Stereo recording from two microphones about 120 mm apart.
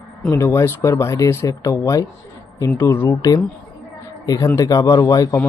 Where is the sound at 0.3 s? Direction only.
25° left (ahead or behind).